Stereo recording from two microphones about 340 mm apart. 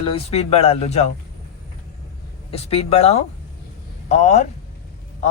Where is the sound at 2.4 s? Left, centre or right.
Centre.